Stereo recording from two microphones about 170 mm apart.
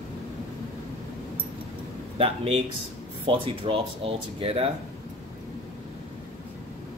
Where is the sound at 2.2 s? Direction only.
35° right (ahead or behind).